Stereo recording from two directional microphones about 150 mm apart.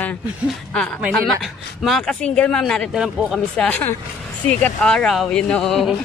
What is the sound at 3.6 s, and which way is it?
Speech, 10° left (ahead or behind).